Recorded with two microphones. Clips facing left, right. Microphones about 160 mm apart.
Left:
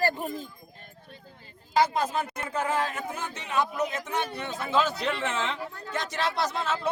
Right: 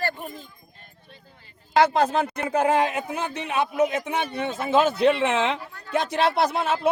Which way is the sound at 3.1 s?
65° right (ahead or behind).